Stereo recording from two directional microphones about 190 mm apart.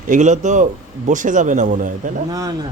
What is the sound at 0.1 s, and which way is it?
A man's voice, 40° right (ahead or behind).